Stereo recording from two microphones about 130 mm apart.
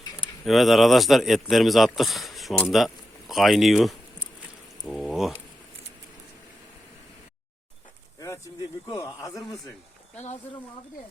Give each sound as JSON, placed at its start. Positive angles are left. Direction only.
{"t": 0.2, "sound": "a man's voice", "side_deg": 0}
{"t": 8.9, "sound": "a man's voice", "side_deg": 30}